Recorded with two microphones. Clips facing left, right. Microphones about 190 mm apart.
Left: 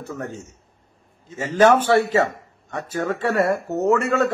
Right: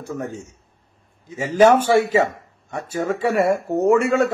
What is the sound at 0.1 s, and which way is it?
A man's voice, 10° right (ahead or behind).